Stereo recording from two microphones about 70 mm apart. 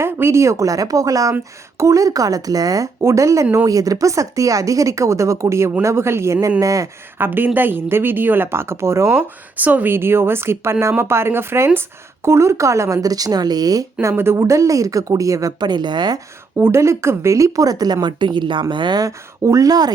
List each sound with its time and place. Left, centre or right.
0.0 s a woman's voice: right
3.0 s speech: right
6.6 s speech: right
7.2 s speech: right
9.6 s a woman's voice: right
14.0 s speech: right
15.6 s speech: right
16.6 s a woman's voice: right
19.0 s a woman's voice: right